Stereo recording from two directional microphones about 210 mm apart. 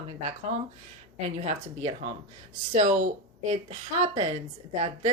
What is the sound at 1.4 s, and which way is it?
A woman's voice, 30° right (ahead or behind).